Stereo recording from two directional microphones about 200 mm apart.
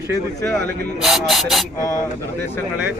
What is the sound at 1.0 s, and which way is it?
Speech, centre (ahead or behind).